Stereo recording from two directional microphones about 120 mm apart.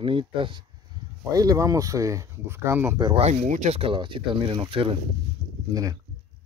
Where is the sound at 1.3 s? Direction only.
30° right (ahead or behind).